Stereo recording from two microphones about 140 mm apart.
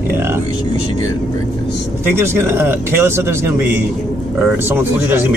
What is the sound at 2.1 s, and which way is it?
Speech, 15° right (ahead or behind).